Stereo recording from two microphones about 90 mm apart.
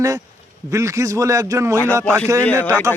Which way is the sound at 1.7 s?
20° left (ahead or behind).